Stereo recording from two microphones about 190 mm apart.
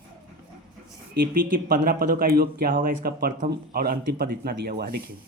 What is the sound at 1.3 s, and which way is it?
Speech, 45° right (ahead or behind).